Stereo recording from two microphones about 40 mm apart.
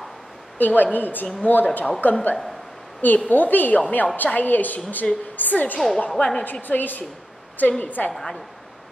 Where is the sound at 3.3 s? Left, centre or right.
Left.